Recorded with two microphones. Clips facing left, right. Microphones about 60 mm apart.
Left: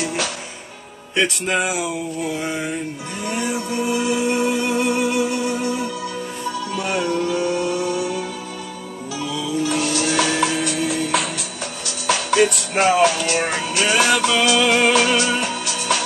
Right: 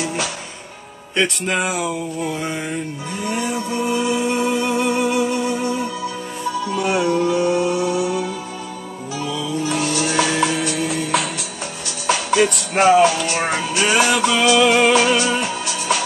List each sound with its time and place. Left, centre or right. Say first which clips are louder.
1.1 s a sound: even; centre
3.3 s music: right 1 dB; centre
6.7 s music: right 4 dB; centre
9.3 s music: left 1 dB; centre